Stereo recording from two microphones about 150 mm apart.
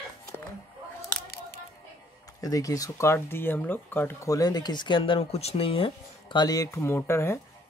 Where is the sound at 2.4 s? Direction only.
25° left (ahead or behind).